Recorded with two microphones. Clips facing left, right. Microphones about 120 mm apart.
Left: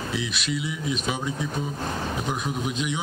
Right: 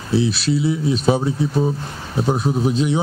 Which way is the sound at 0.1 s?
35° right (ahead or behind).